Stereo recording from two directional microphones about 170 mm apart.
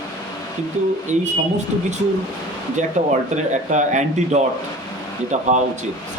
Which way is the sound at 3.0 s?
45° right (ahead or behind).